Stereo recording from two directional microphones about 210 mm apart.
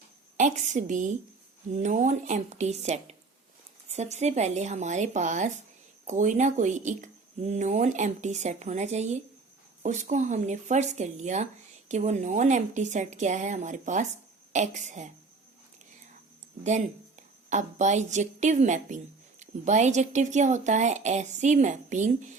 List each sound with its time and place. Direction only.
0.3 s speech: 35° right (ahead or behind)
16.6 s a woman's voice: 35° right (ahead or behind)